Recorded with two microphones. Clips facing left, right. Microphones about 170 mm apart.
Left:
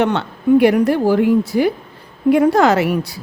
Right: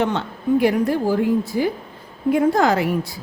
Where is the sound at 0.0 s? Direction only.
70° left (ahead or behind).